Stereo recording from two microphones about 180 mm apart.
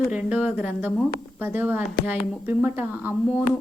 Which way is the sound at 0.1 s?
10° right (ahead or behind).